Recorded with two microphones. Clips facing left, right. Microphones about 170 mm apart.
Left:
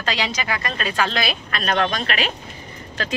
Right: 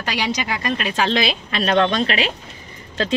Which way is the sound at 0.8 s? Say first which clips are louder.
Right 2 dB; 25° right (ahead or behind).